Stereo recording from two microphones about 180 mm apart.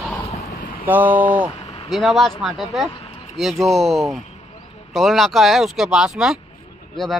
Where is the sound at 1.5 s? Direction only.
35° left (ahead or behind).